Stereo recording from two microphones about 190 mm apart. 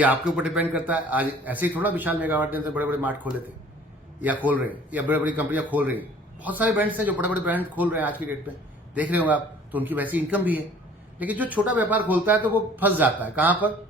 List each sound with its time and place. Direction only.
0.3 s a man's voice: 5° right (ahead or behind)
4.4 s a man's voice: 10° right (ahead or behind)